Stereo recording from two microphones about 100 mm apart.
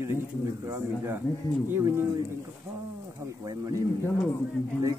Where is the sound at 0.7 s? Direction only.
25° right (ahead or behind).